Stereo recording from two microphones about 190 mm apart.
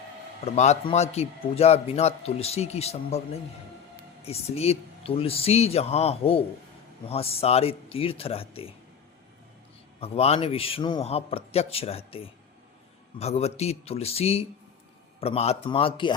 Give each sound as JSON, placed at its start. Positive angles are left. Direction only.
{"t": 0.4, "sound": "a man's voice", "side_deg": 35}
{"t": 4.3, "sound": "a man's voice", "side_deg": 30}
{"t": 10.0, "sound": "a man's voice", "side_deg": 30}